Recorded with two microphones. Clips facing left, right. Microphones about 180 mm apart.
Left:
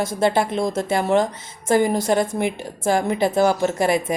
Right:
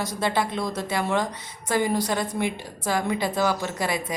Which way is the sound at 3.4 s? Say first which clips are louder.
Left 7 dB; 50° left (ahead or behind).